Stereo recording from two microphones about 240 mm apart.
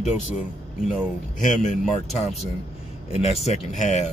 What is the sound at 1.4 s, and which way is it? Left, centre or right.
Speech, left.